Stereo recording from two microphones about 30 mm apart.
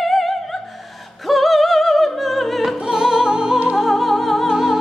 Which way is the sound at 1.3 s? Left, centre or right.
Centre.